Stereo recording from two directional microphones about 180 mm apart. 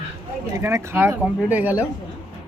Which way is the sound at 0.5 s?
15° right (ahead or behind).